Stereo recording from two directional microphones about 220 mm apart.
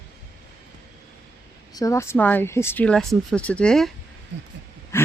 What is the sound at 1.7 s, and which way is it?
Speech, 15° left (ahead or behind).